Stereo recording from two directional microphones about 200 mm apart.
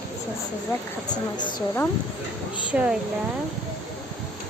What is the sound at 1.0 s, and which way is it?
Speech, 20° left (ahead or behind).